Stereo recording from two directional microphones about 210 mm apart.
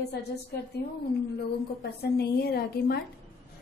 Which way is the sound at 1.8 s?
50° left (ahead or behind).